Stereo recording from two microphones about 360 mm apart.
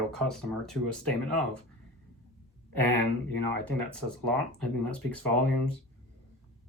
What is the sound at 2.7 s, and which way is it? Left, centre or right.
Speech, right.